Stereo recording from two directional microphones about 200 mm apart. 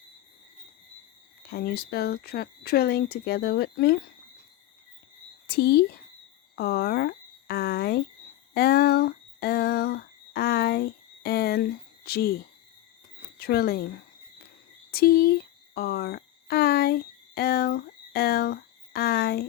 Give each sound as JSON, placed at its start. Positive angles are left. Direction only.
{"t": 1.5, "sound": "speech", "side_deg": 50}
{"t": 5.5, "sound": "speech", "side_deg": 50}
{"t": 8.5, "sound": "a sound", "side_deg": 50}
{"t": 13.4, "sound": "speech", "side_deg": 50}